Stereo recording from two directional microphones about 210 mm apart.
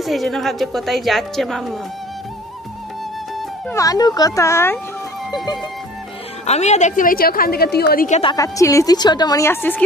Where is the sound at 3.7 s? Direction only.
15° left (ahead or behind).